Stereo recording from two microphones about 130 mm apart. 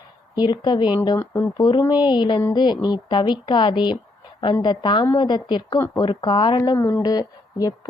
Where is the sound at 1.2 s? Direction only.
20° left (ahead or behind).